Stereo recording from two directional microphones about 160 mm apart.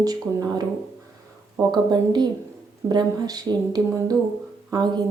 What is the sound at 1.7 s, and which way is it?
A woman's voice, 25° right (ahead or behind).